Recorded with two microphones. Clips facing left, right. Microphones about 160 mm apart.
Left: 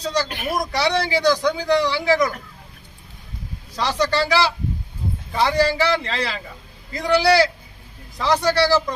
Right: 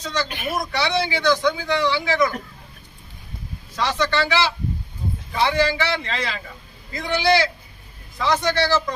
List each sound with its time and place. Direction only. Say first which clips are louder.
0.0 s speech: left 3 dB; 35° left (ahead or behind)
3.8 s speech: left 1 dB; 35° left (ahead or behind)